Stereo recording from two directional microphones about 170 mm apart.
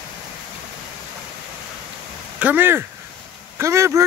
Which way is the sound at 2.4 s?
10° right (ahead or behind).